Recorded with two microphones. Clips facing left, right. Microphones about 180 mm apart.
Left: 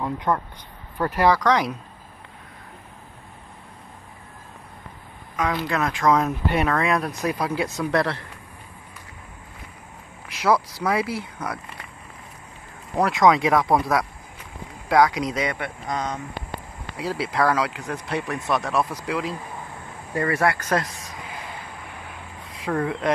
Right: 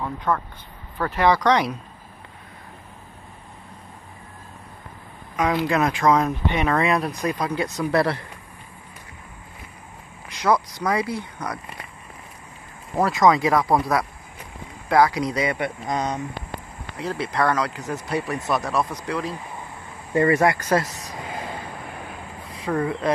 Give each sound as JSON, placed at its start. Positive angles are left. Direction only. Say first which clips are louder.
{"t": 0.0, "sound": "speech", "louder": "left 1 dB", "side_deg": 15}
{"t": 1.1, "sound": "speech", "louder": "right 1 dB", "side_deg": 5}
{"t": 5.4, "sound": "speech", "louder": "right 3 dB", "side_deg": -15}
{"t": 6.0, "sound": "speech", "louder": "left 2 dB", "side_deg": 0}
{"t": 10.4, "sound": "speech", "louder": "even", "side_deg": 5}
{"t": 12.9, "sound": "speech", "louder": "even", "side_deg": 0}
{"t": 15.5, "sound": "speech", "louder": "right 3 dB", "side_deg": -15}
{"t": 16.9, "sound": "speech", "louder": "even", "side_deg": 10}
{"t": 20.2, "sound": "speech", "louder": "right 4 dB", "side_deg": -20}
{"t": 22.5, "sound": "speech", "louder": "right 1 dB", "side_deg": 0}